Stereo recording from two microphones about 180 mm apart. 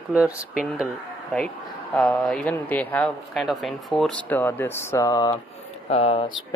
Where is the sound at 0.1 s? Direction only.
5° right (ahead or behind).